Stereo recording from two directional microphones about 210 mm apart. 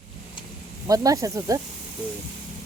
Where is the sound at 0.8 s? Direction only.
15° right (ahead or behind).